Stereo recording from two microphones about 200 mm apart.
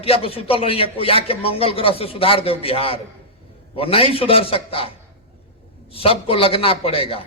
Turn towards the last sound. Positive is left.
turn(degrees=30)  # may be behind; listen again after turning